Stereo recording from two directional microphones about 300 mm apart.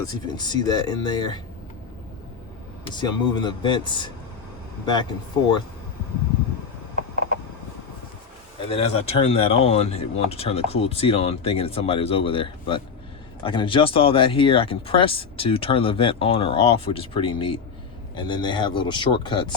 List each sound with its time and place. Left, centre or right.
0.0 s speech: centre
2.8 s speech: centre
8.7 s speech: centre